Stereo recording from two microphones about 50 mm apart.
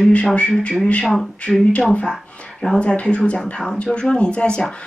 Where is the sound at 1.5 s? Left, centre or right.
Centre.